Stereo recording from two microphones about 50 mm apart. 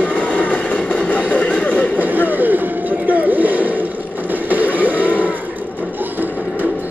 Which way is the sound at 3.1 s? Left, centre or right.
Right.